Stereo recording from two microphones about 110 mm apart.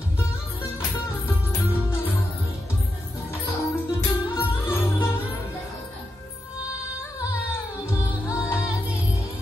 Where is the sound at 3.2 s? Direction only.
25° left (ahead or behind).